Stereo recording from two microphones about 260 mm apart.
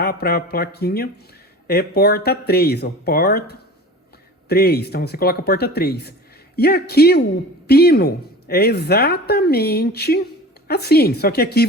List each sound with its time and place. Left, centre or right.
0.0 s a woman's voice: left